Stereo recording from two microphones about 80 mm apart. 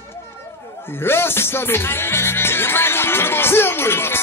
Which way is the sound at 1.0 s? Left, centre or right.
Left.